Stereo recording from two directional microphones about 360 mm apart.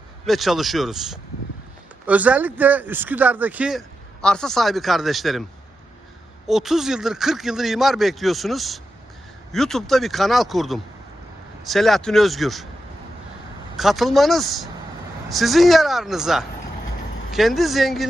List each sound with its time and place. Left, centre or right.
0.3 s speech: centre
6.5 s speech: centre
13.7 s speech: centre